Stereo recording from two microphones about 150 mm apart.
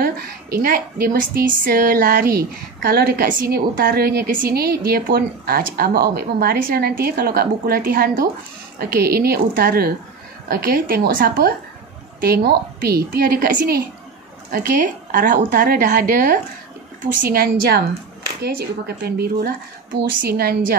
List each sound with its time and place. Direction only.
0.0 s a woman's voice: 75° right (ahead or behind)
8.7 s a woman's voice: 90° right
12.2 s a woman's voice: 90° right
19.0 s a woman's voice: 90° right